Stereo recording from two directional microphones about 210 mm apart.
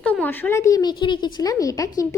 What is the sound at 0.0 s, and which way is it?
A woman's voice, 5° left (ahead or behind).